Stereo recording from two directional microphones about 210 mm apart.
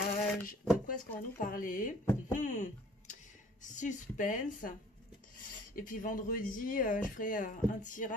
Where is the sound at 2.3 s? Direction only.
35° left (ahead or behind).